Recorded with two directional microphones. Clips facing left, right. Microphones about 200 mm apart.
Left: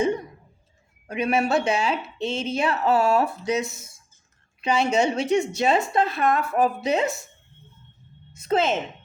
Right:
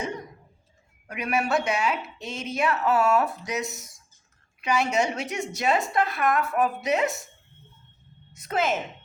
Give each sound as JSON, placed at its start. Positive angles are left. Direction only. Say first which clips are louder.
{"t": 1.0, "sound": "a woman's voice", "louder": "left 4 dB", "side_deg": 25}
{"t": 8.3, "sound": "a woman's voice", "louder": "left 4 dB", "side_deg": 25}